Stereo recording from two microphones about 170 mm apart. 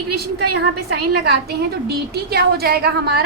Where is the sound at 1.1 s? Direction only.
70° right (ahead or behind).